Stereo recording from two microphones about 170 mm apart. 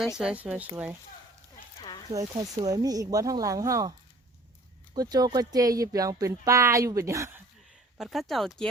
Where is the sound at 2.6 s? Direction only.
20° right (ahead or behind).